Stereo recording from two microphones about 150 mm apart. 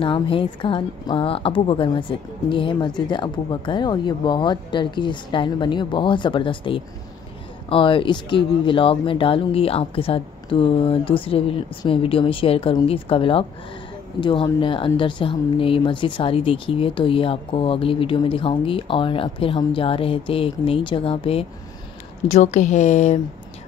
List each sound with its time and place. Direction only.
0.0 s a woman's voice: 35° left (ahead or behind)
22.3 s speech: 50° left (ahead or behind)